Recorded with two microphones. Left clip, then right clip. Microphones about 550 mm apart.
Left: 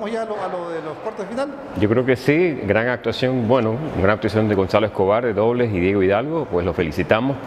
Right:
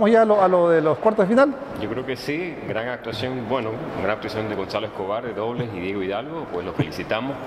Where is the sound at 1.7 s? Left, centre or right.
Left.